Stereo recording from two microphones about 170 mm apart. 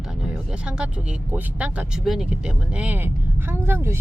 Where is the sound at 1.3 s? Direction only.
5° right (ahead or behind).